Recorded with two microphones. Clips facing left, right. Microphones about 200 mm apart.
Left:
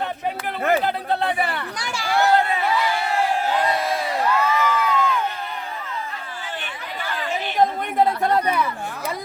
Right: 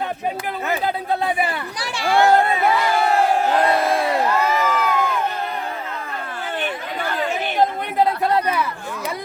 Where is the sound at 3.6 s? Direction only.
55° right (ahead or behind).